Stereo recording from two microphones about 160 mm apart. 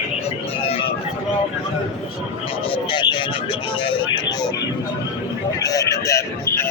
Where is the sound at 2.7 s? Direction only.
30° left (ahead or behind).